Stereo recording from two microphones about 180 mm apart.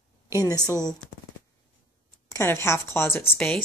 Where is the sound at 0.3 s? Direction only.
20° left (ahead or behind).